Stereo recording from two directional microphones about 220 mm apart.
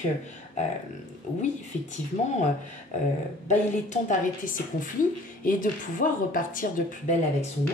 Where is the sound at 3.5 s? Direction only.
35° left (ahead or behind).